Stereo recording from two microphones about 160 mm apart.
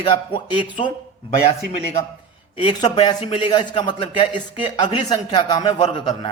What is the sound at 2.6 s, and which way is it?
A man's voice, 25° left (ahead or behind).